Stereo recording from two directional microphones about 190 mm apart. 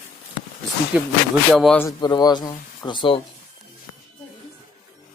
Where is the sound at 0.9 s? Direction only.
5° right (ahead or behind).